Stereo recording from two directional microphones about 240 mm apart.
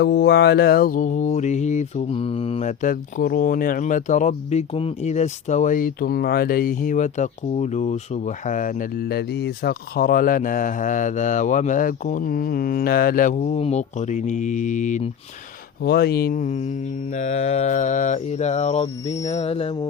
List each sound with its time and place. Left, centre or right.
0.0 s mantra: left
15.8 s mantra: left
19.0 s music: centre
19.3 s music: left